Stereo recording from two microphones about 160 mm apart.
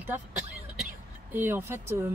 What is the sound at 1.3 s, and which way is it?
Speech, 10° right (ahead or behind).